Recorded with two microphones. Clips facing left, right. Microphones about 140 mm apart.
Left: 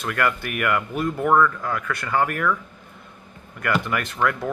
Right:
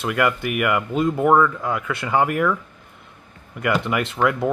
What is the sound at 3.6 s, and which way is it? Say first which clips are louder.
Speech: right 3 dB; 15° right (ahead or behind).